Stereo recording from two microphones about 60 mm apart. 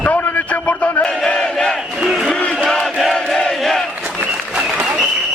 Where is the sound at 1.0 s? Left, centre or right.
Centre.